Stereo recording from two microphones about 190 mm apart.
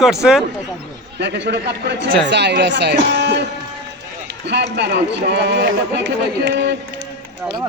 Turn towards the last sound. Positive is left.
turn(degrees=-65)  # may be behind; listen again after turning